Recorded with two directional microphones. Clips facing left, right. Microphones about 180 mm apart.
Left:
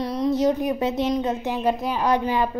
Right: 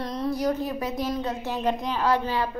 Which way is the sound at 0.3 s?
20° left (ahead or behind).